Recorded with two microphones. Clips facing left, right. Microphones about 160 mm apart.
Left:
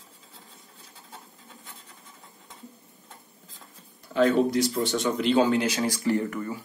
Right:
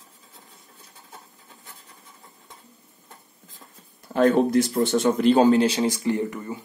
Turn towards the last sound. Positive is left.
turn(degrees=-20)  # may be behind; listen again after turning